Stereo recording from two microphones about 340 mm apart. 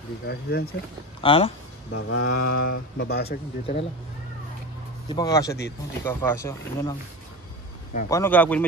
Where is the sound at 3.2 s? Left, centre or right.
Centre.